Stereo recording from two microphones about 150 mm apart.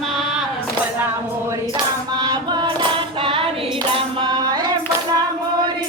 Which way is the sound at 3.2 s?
35° right (ahead or behind).